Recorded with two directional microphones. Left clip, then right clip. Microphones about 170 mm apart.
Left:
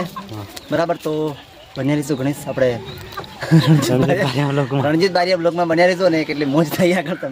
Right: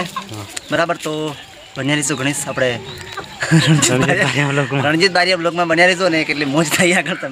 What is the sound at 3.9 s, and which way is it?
Speech, centre (ahead or behind).